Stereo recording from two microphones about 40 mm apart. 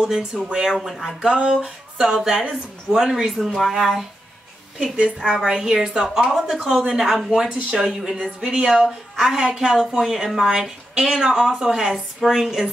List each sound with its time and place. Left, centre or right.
0.0 s a woman's voice: centre
2.3 s speech: right
2.9 s speech: centre
4.9 s a woman's voice: right; by 6.4 s centre
6.4 s a woman's voice: centre